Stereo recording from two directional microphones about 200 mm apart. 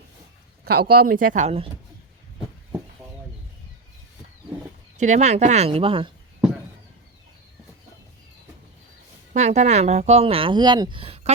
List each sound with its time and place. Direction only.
0.6 s speech: 45° right (ahead or behind)
4.9 s speech: 35° right (ahead or behind)
9.3 s speech: 35° right (ahead or behind)